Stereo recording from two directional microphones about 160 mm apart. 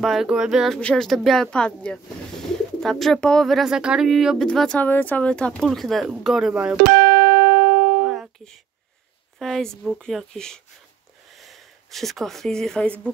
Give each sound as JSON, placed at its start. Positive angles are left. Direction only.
{"t": 0.0, "sound": "speech", "side_deg": 0}
{"t": 6.8, "sound": "music", "side_deg": -65}
{"t": 8.0, "sound": "music", "side_deg": 0}
{"t": 9.4, "sound": "speech", "side_deg": 5}